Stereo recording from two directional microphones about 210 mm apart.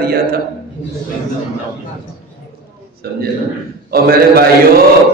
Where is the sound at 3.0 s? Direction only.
50° right (ahead or behind).